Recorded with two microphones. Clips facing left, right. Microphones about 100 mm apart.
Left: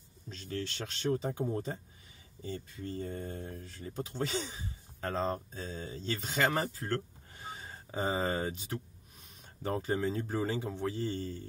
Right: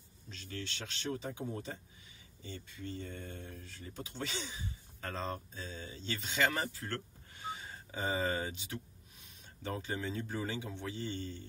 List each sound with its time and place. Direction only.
0.3 s speech: 45° left (ahead or behind)